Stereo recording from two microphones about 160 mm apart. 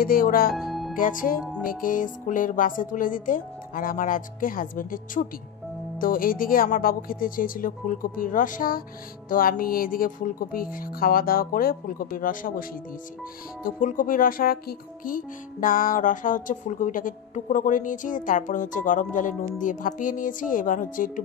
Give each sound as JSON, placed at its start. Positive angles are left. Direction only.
{"t": 0.0, "sound": "speech", "side_deg": 65}
{"t": 0.5, "sound": "music", "side_deg": 0}
{"t": 0.9, "sound": "speech", "side_deg": 55}
{"t": 13.7, "sound": "speech", "side_deg": 55}